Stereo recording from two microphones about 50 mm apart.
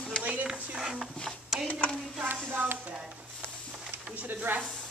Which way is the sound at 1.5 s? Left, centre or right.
Centre.